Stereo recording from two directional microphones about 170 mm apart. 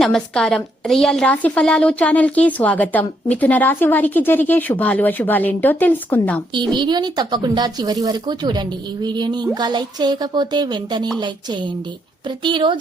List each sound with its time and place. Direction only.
0.0 s a woman's voice: 5° left (ahead or behind)
6.5 s a woman's voice: 25° right (ahead or behind)
12.4 s a woman's voice: 30° right (ahead or behind)